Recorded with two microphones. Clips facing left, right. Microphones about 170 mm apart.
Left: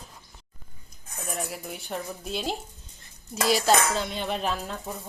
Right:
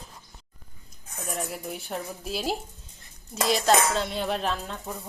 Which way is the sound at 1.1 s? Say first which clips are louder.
Right 1 dB; centre (ahead or behind).